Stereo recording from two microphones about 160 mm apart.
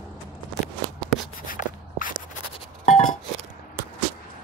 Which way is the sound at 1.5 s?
55° left (ahead or behind).